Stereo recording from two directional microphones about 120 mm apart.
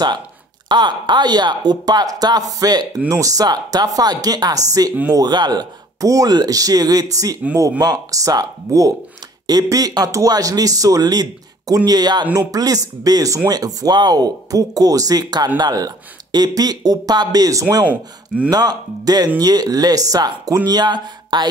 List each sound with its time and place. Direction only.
0.7 s speech: 40° right (ahead or behind)